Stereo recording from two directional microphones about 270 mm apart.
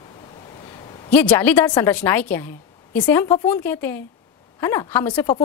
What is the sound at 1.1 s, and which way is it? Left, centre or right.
A woman's voice, centre.